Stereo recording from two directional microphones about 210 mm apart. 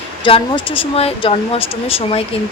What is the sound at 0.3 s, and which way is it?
A woman's voice, 25° left (ahead or behind).